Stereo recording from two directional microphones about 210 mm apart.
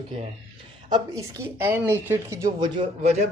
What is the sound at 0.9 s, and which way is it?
Speech, 20° right (ahead or behind).